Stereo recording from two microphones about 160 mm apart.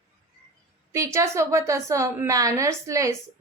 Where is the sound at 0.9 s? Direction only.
20° right (ahead or behind).